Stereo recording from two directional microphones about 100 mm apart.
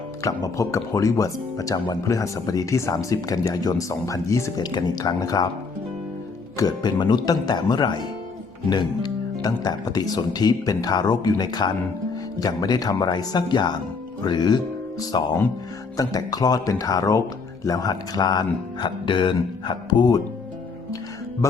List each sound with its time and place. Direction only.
0.2 s speech: 35° left (ahead or behind)
4.5 s speech: 45° left (ahead or behind)
6.6 s speech: 40° left (ahead or behind)